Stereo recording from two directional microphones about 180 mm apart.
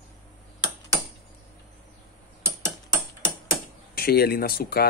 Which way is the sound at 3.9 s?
60° left (ahead or behind).